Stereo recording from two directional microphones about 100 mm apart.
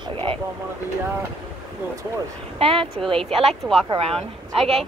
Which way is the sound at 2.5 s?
65° right (ahead or behind).